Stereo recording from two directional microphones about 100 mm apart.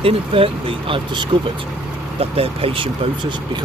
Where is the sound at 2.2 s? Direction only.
80° right; by 3.3 s 60° right (ahead or behind).